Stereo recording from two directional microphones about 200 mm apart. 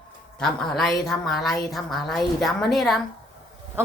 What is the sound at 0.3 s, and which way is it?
A woman's voice, centre (ahead or behind).